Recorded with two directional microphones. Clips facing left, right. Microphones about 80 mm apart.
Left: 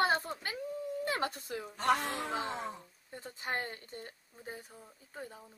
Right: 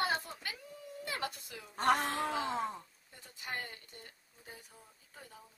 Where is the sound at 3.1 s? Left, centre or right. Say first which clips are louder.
Left 5 dB; left.